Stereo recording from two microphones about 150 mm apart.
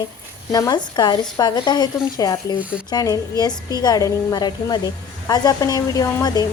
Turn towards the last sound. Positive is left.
turn(degrees=25)  # may be behind; listen again after turning